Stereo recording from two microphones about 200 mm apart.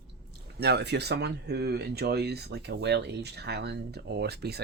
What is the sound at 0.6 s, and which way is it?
Speech, 55° right (ahead or behind).